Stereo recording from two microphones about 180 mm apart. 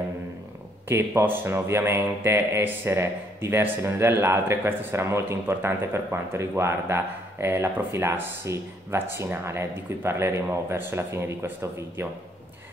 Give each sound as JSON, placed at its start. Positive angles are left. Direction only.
{"t": 0.8, "sound": "a man's voice", "side_deg": -15}